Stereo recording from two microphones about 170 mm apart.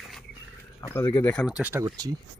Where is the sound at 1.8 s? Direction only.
20° right (ahead or behind).